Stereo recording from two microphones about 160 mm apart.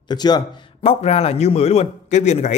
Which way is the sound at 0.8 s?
40° left (ahead or behind).